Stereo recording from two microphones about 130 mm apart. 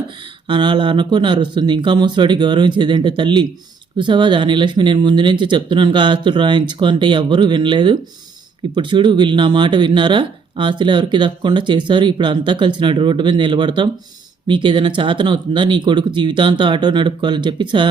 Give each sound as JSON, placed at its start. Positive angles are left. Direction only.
{"t": 0.4, "sound": "speech", "side_deg": -35}